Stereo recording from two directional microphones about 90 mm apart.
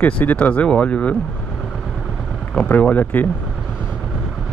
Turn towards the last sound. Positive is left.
turn(degrees=20)  # may be behind; listen again after turning